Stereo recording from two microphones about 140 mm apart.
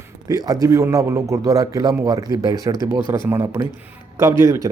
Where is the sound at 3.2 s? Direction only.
15° right (ahead or behind).